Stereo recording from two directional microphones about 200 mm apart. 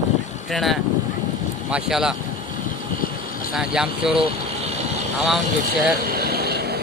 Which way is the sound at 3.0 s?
45° left (ahead or behind).